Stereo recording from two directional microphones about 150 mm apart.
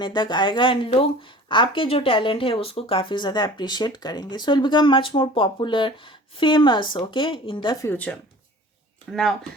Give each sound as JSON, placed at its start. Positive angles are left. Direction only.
{"t": 0.0, "sound": "speech", "side_deg": 30}
{"t": 7.9, "sound": "speech", "side_deg": 10}